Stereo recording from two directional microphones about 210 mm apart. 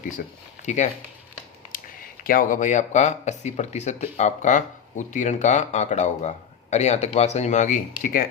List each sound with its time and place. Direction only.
0.2 s speech: 35° left (ahead or behind)